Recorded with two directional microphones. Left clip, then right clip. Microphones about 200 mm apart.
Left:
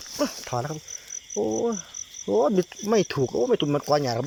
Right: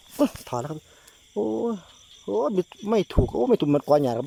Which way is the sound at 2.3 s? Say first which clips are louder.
Left 3 dB; 10° right (ahead or behind).